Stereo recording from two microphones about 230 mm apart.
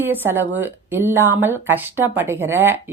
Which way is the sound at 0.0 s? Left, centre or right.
Centre.